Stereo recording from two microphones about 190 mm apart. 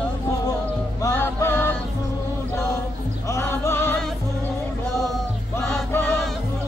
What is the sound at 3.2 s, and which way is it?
Music, 15° left (ahead or behind).